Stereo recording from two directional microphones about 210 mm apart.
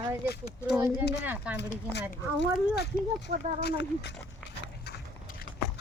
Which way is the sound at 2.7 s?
50° left (ahead or behind).